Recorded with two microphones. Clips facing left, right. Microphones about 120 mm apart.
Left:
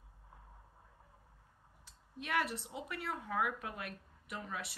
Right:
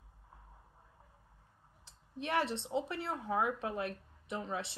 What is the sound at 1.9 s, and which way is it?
Speech, 30° right (ahead or behind).